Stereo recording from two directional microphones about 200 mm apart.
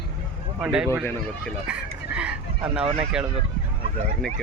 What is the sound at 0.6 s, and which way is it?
Speech, 5° right (ahead or behind).